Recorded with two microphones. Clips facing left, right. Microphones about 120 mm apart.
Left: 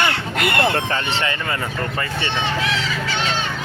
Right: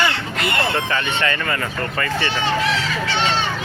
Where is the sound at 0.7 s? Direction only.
30° left (ahead or behind).